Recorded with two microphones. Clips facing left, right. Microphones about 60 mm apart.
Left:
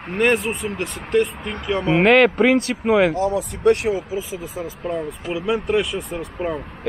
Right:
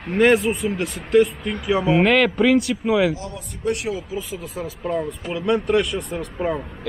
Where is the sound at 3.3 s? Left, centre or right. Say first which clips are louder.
Left 8 dB; left.